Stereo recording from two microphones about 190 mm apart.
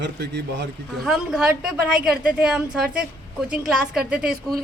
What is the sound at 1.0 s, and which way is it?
A woman's voice, centre (ahead or behind).